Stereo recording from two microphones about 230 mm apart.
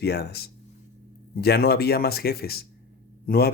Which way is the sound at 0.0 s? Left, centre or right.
Left.